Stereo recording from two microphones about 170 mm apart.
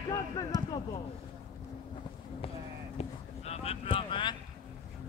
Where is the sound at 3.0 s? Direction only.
35° left (ahead or behind).